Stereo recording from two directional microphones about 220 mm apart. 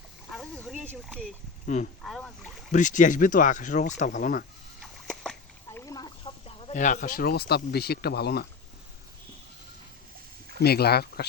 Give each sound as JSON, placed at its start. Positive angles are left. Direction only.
{"t": 0.3, "sound": "a sound", "side_deg": 0}
{"t": 1.6, "sound": "speech", "side_deg": 35}
{"t": 2.0, "sound": "speech", "side_deg": 0}
{"t": 2.7, "sound": "speech", "side_deg": 35}
{"t": 4.8, "sound": "a sound", "side_deg": 0}
{"t": 5.8, "sound": "speech", "side_deg": 15}
{"t": 10.6, "sound": "speech", "side_deg": 45}